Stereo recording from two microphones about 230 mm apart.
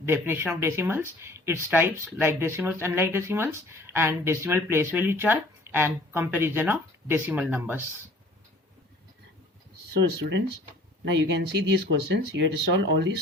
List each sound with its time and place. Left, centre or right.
0.0 s speech: centre
10.0 s speech: right